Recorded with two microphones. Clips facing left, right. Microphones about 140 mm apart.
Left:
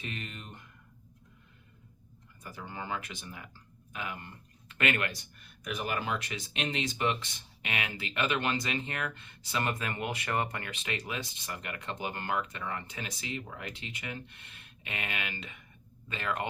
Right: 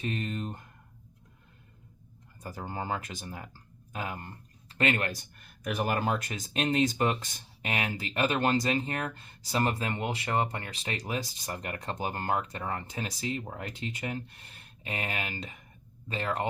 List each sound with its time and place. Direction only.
0.0 s speech: 40° right (ahead or behind)
2.4 s speech: 40° right (ahead or behind)
5.4 s speech: 50° right (ahead or behind); by 16.5 s 35° right (ahead or behind)